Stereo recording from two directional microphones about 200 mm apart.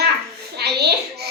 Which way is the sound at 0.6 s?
55° right (ahead or behind).